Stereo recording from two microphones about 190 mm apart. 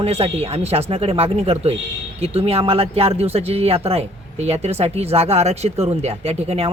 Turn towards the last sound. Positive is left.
turn(degrees=-35)  # may be behind; listen again after turning